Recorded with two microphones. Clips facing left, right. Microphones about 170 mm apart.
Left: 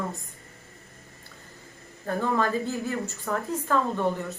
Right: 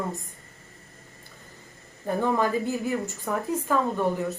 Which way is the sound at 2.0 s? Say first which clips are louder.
Right 2 dB; 20° right (ahead or behind).